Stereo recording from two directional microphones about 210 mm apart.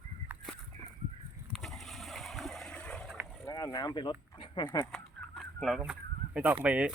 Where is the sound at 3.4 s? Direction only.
15° left (ahead or behind).